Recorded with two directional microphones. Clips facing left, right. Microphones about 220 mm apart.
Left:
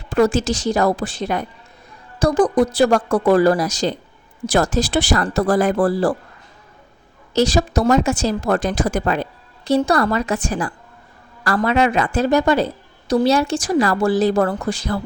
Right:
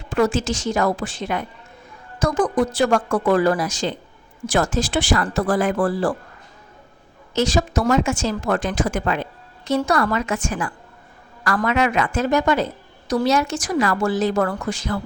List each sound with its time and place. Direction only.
0.1 s a woman's voice: 40° left (ahead or behind)
7.3 s a woman's voice: 35° left (ahead or behind)